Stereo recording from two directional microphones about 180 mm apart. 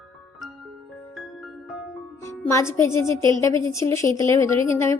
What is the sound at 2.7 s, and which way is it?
Speech, 15° left (ahead or behind).